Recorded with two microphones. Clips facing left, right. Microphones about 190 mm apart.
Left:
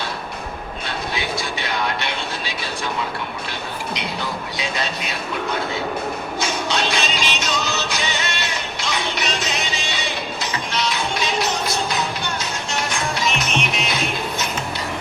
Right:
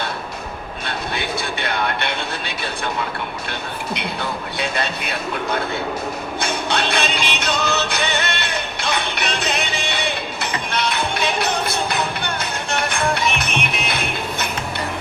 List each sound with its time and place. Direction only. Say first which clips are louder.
0.9 s train: right 1 dB; 60° right (ahead or behind)
3.9 s speech: right 2 dB; 60° right (ahead or behind)
6.4 s music: right 1 dB; 60° right (ahead or behind)